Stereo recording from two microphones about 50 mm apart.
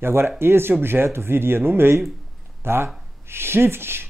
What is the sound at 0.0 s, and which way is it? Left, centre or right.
Speech, right.